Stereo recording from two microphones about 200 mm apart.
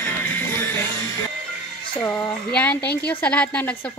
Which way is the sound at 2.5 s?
5° left (ahead or behind).